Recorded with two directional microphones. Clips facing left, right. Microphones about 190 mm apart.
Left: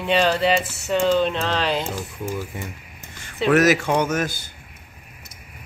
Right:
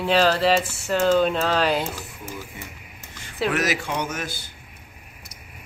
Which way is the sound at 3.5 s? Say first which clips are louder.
Left 9 dB; 45° left (ahead or behind).